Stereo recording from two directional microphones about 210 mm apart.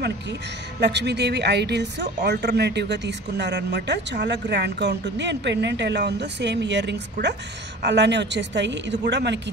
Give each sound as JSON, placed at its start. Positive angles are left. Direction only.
{"t": 0.7, "sound": "a woman's voice", "side_deg": -55}